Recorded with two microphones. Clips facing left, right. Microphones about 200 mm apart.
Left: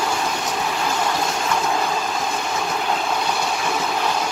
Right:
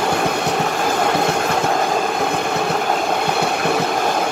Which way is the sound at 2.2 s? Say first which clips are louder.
Right 5 dB; 60° right (ahead or behind).